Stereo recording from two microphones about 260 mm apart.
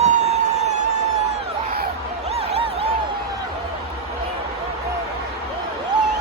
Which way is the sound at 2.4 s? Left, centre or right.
Right.